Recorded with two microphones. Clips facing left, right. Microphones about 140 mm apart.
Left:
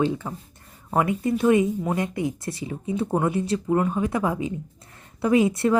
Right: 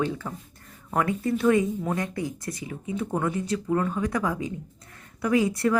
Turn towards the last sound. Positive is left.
turn(degrees=25)  # may be behind; listen again after turning